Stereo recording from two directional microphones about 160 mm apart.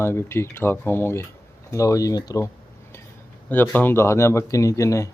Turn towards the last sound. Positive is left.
turn(degrees=20)  # may be behind; listen again after turning